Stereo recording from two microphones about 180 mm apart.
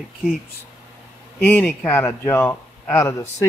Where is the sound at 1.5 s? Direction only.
10° left (ahead or behind).